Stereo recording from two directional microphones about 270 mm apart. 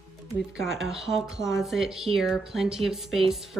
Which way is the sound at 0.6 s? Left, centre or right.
Centre.